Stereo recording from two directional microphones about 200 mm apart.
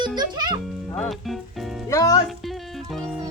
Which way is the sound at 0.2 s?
20° right (ahead or behind).